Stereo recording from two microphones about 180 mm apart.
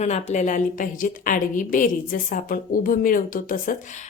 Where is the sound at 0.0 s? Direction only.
40° left (ahead or behind).